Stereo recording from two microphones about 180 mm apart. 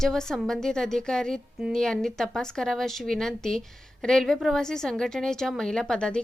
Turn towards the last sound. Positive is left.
turn(degrees=5)  # may be behind; listen again after turning